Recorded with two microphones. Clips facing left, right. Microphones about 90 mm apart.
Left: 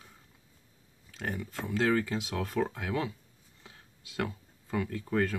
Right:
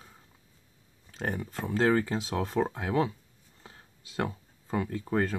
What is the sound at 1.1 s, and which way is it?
Speech, 35° right (ahead or behind).